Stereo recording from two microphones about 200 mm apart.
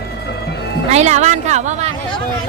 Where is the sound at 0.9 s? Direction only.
35° right (ahead or behind).